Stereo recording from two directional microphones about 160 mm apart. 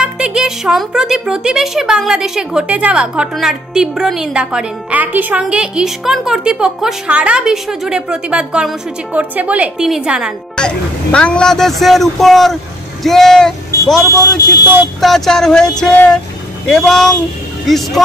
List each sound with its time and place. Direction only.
0.0 s speech: 5° right (ahead or behind)
10.5 s speech: 5° left (ahead or behind)
14.1 s speech: 20° left (ahead or behind)
15.0 s speech: centre (ahead or behind)